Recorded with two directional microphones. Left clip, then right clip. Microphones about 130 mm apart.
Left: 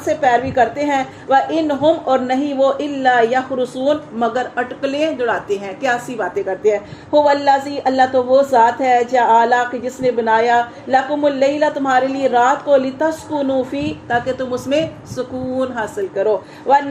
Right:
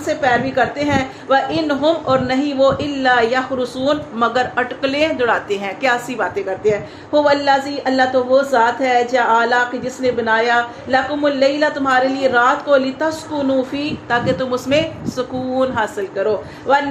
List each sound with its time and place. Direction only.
0.1 s a woman's voice: 35° left (ahead or behind)